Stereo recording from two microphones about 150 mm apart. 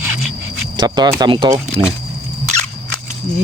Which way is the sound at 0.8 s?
25° right (ahead or behind).